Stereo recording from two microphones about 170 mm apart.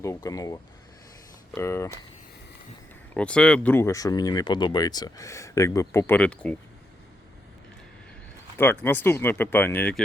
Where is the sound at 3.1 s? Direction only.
5° left (ahead or behind).